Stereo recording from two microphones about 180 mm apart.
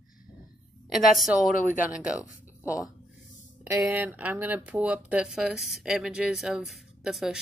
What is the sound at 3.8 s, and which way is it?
Speech, 10° right (ahead or behind).